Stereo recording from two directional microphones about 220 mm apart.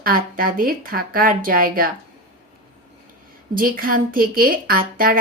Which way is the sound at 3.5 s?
40° right (ahead or behind).